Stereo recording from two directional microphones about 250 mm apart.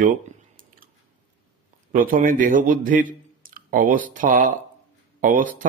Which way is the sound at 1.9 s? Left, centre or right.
Right.